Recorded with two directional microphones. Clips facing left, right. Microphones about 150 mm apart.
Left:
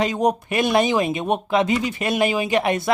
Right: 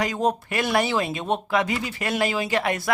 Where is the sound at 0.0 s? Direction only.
20° left (ahead or behind).